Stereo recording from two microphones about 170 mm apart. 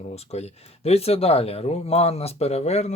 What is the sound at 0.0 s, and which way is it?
Speech, 40° left (ahead or behind).